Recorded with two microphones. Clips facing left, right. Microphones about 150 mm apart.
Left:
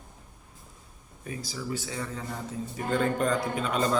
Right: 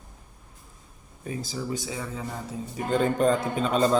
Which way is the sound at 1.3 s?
25° right (ahead or behind).